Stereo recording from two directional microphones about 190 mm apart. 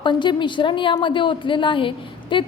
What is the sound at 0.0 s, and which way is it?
A woman's voice, 25° left (ahead or behind).